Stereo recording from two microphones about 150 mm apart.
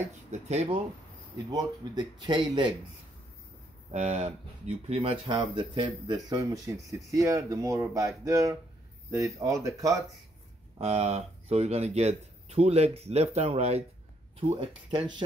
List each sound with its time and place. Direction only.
0.3 s speech: 45° right (ahead or behind)
1.5 s speech: 30° right (ahead or behind)
3.9 s speech: 45° right (ahead or behind); by 10.0 s 20° right (ahead or behind)
10.8 s speech: 45° right (ahead or behind)
14.9 s speech: 30° right (ahead or behind)